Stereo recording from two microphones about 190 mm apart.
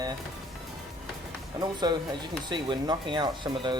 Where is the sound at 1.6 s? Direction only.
20° right (ahead or behind).